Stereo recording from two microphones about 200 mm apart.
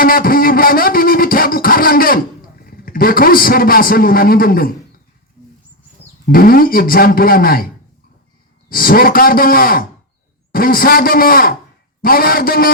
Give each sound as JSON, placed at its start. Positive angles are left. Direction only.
{"t": 0.0, "sound": "a sound", "side_deg": 45}
{"t": 2.6, "sound": "a man's voice", "side_deg": 45}
{"t": 6.2, "sound": "a man's voice", "side_deg": 45}
{"t": 8.7, "sound": "a man's voice", "side_deg": 45}